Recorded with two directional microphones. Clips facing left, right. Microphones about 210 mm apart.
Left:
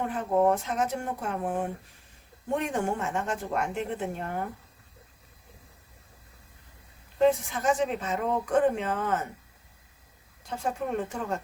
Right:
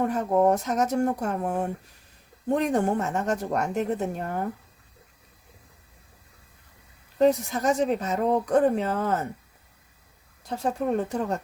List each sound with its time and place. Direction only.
0.0 s speech: 40° right (ahead or behind)
2.6 s speech: 35° right (ahead or behind)
7.2 s speech: 40° right (ahead or behind)
10.5 s speech: 35° right (ahead or behind)